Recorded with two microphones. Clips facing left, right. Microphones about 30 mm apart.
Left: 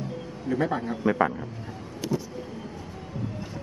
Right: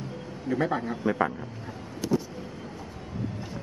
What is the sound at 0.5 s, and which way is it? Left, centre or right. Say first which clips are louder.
Speech: left 1 dB; centre.